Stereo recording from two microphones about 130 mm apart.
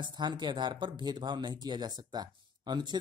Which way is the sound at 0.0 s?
35° right (ahead or behind).